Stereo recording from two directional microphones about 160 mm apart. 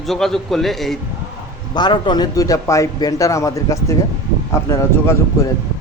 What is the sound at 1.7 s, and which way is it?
A man's voice, 30° left (ahead or behind).